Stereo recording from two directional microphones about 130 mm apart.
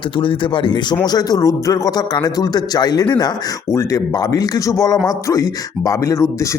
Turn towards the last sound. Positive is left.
turn(degrees=20)  # may be behind; listen again after turning